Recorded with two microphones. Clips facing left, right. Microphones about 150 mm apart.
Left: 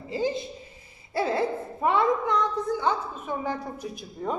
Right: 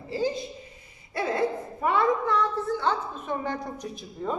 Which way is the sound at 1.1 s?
30° left (ahead or behind).